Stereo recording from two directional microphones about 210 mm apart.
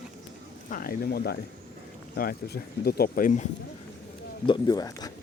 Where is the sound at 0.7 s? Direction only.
45° left (ahead or behind).